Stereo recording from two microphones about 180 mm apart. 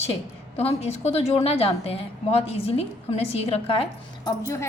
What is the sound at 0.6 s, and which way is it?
A woman's voice, 35° left (ahead or behind).